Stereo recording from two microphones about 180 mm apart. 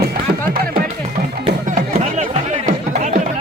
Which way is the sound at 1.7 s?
40° right (ahead or behind).